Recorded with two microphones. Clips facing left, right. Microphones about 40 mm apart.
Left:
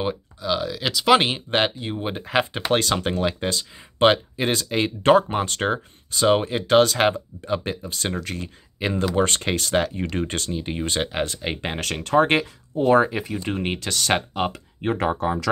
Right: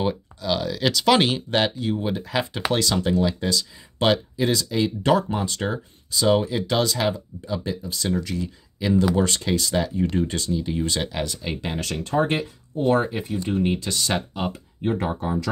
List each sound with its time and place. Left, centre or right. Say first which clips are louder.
0.0 s speech: right 1 dB; centre; by 11.3 s left
11.3 s speech: left 1 dB; left
12.0 s speech: left 5 dB; left
13.5 s speech: right 4 dB; left
14.5 s speech: even; left